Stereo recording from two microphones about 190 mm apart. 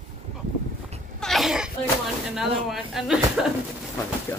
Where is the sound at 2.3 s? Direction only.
Centre (ahead or behind).